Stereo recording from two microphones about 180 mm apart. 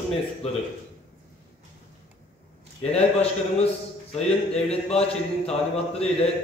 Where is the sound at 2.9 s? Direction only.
35° left (ahead or behind).